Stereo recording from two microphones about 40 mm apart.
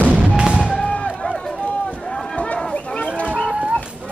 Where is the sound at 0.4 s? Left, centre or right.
Right.